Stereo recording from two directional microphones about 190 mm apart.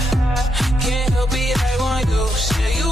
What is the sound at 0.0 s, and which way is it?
Music, centre (ahead or behind).